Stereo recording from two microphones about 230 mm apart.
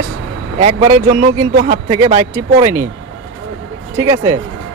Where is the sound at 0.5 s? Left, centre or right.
Right.